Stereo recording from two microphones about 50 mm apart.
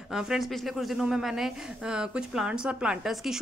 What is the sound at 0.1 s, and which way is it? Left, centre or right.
A woman's voice, centre.